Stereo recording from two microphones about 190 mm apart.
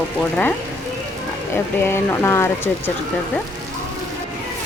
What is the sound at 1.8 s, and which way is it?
Speech, 15° left (ahead or behind).